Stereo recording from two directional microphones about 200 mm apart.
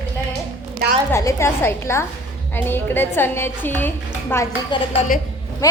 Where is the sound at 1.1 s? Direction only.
15° left (ahead or behind).